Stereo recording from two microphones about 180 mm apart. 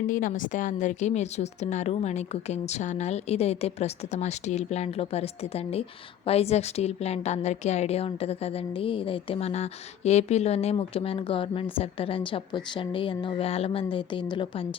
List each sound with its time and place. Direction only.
0.1 s a woman's voice: 45° left (ahead or behind); by 14.7 s 30° left (ahead or behind)